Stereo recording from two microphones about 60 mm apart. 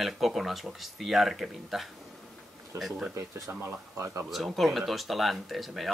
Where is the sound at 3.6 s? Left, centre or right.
Right.